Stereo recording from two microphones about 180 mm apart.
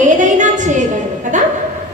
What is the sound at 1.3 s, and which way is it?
Speech, 45° right (ahead or behind).